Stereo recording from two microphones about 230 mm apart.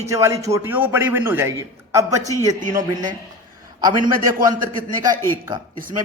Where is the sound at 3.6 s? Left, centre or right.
Centre.